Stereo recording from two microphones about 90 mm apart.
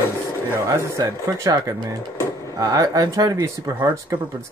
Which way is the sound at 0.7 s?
40° right (ahead or behind).